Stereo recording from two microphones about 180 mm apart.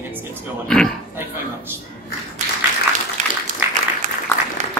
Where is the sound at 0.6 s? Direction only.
5° left (ahead or behind).